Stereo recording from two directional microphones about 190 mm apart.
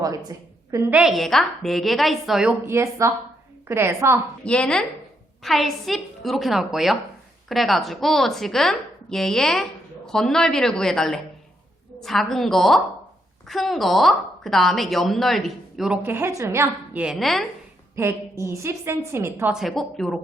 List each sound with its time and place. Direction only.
0.0 s a woman's voice: 20° right (ahead or behind)
0.9 s a woman's voice: centre (ahead or behind)
4.4 s a woman's voice: 5° left (ahead or behind)
17.9 s a woman's voice: 15° right (ahead or behind)
19.5 s a woman's voice: centre (ahead or behind)